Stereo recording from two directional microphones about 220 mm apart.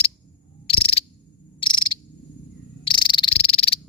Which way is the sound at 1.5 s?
20° left (ahead or behind).